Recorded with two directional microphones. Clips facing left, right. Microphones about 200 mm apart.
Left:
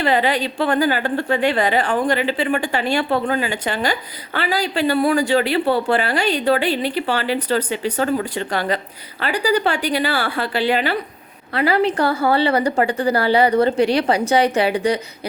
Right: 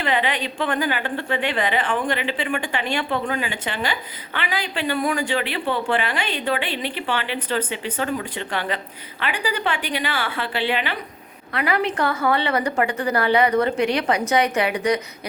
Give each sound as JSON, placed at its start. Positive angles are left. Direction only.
{"t": 0.0, "sound": "a woman's voice", "side_deg": 35}